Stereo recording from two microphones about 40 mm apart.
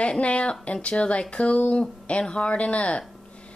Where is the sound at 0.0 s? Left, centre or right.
Left.